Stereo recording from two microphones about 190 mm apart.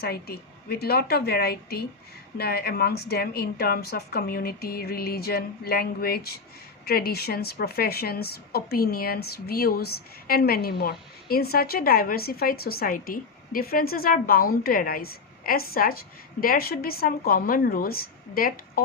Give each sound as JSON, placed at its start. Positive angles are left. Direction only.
{"t": 0.0, "sound": "a woman's voice", "side_deg": 55}